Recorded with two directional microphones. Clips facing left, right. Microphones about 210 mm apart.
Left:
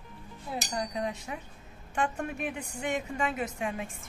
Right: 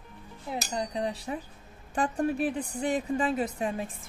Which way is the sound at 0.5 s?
25° right (ahead or behind).